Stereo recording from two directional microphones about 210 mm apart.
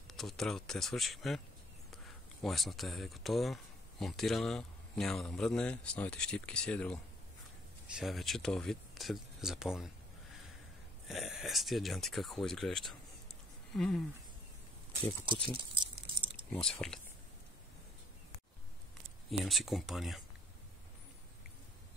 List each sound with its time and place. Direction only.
0.1 s speech: centre (ahead or behind)
2.4 s speech: centre (ahead or behind)
11.1 s speech: centre (ahead or behind)
15.5 s a sound: 25° right (ahead or behind)
16.5 s speech: 5° left (ahead or behind)
19.4 s speech: centre (ahead or behind)